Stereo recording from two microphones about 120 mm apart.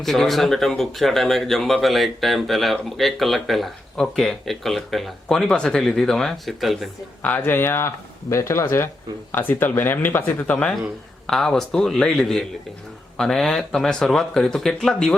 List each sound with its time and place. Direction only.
0.0 s speech: centre (ahead or behind)
7.2 s speech: 10° left (ahead or behind)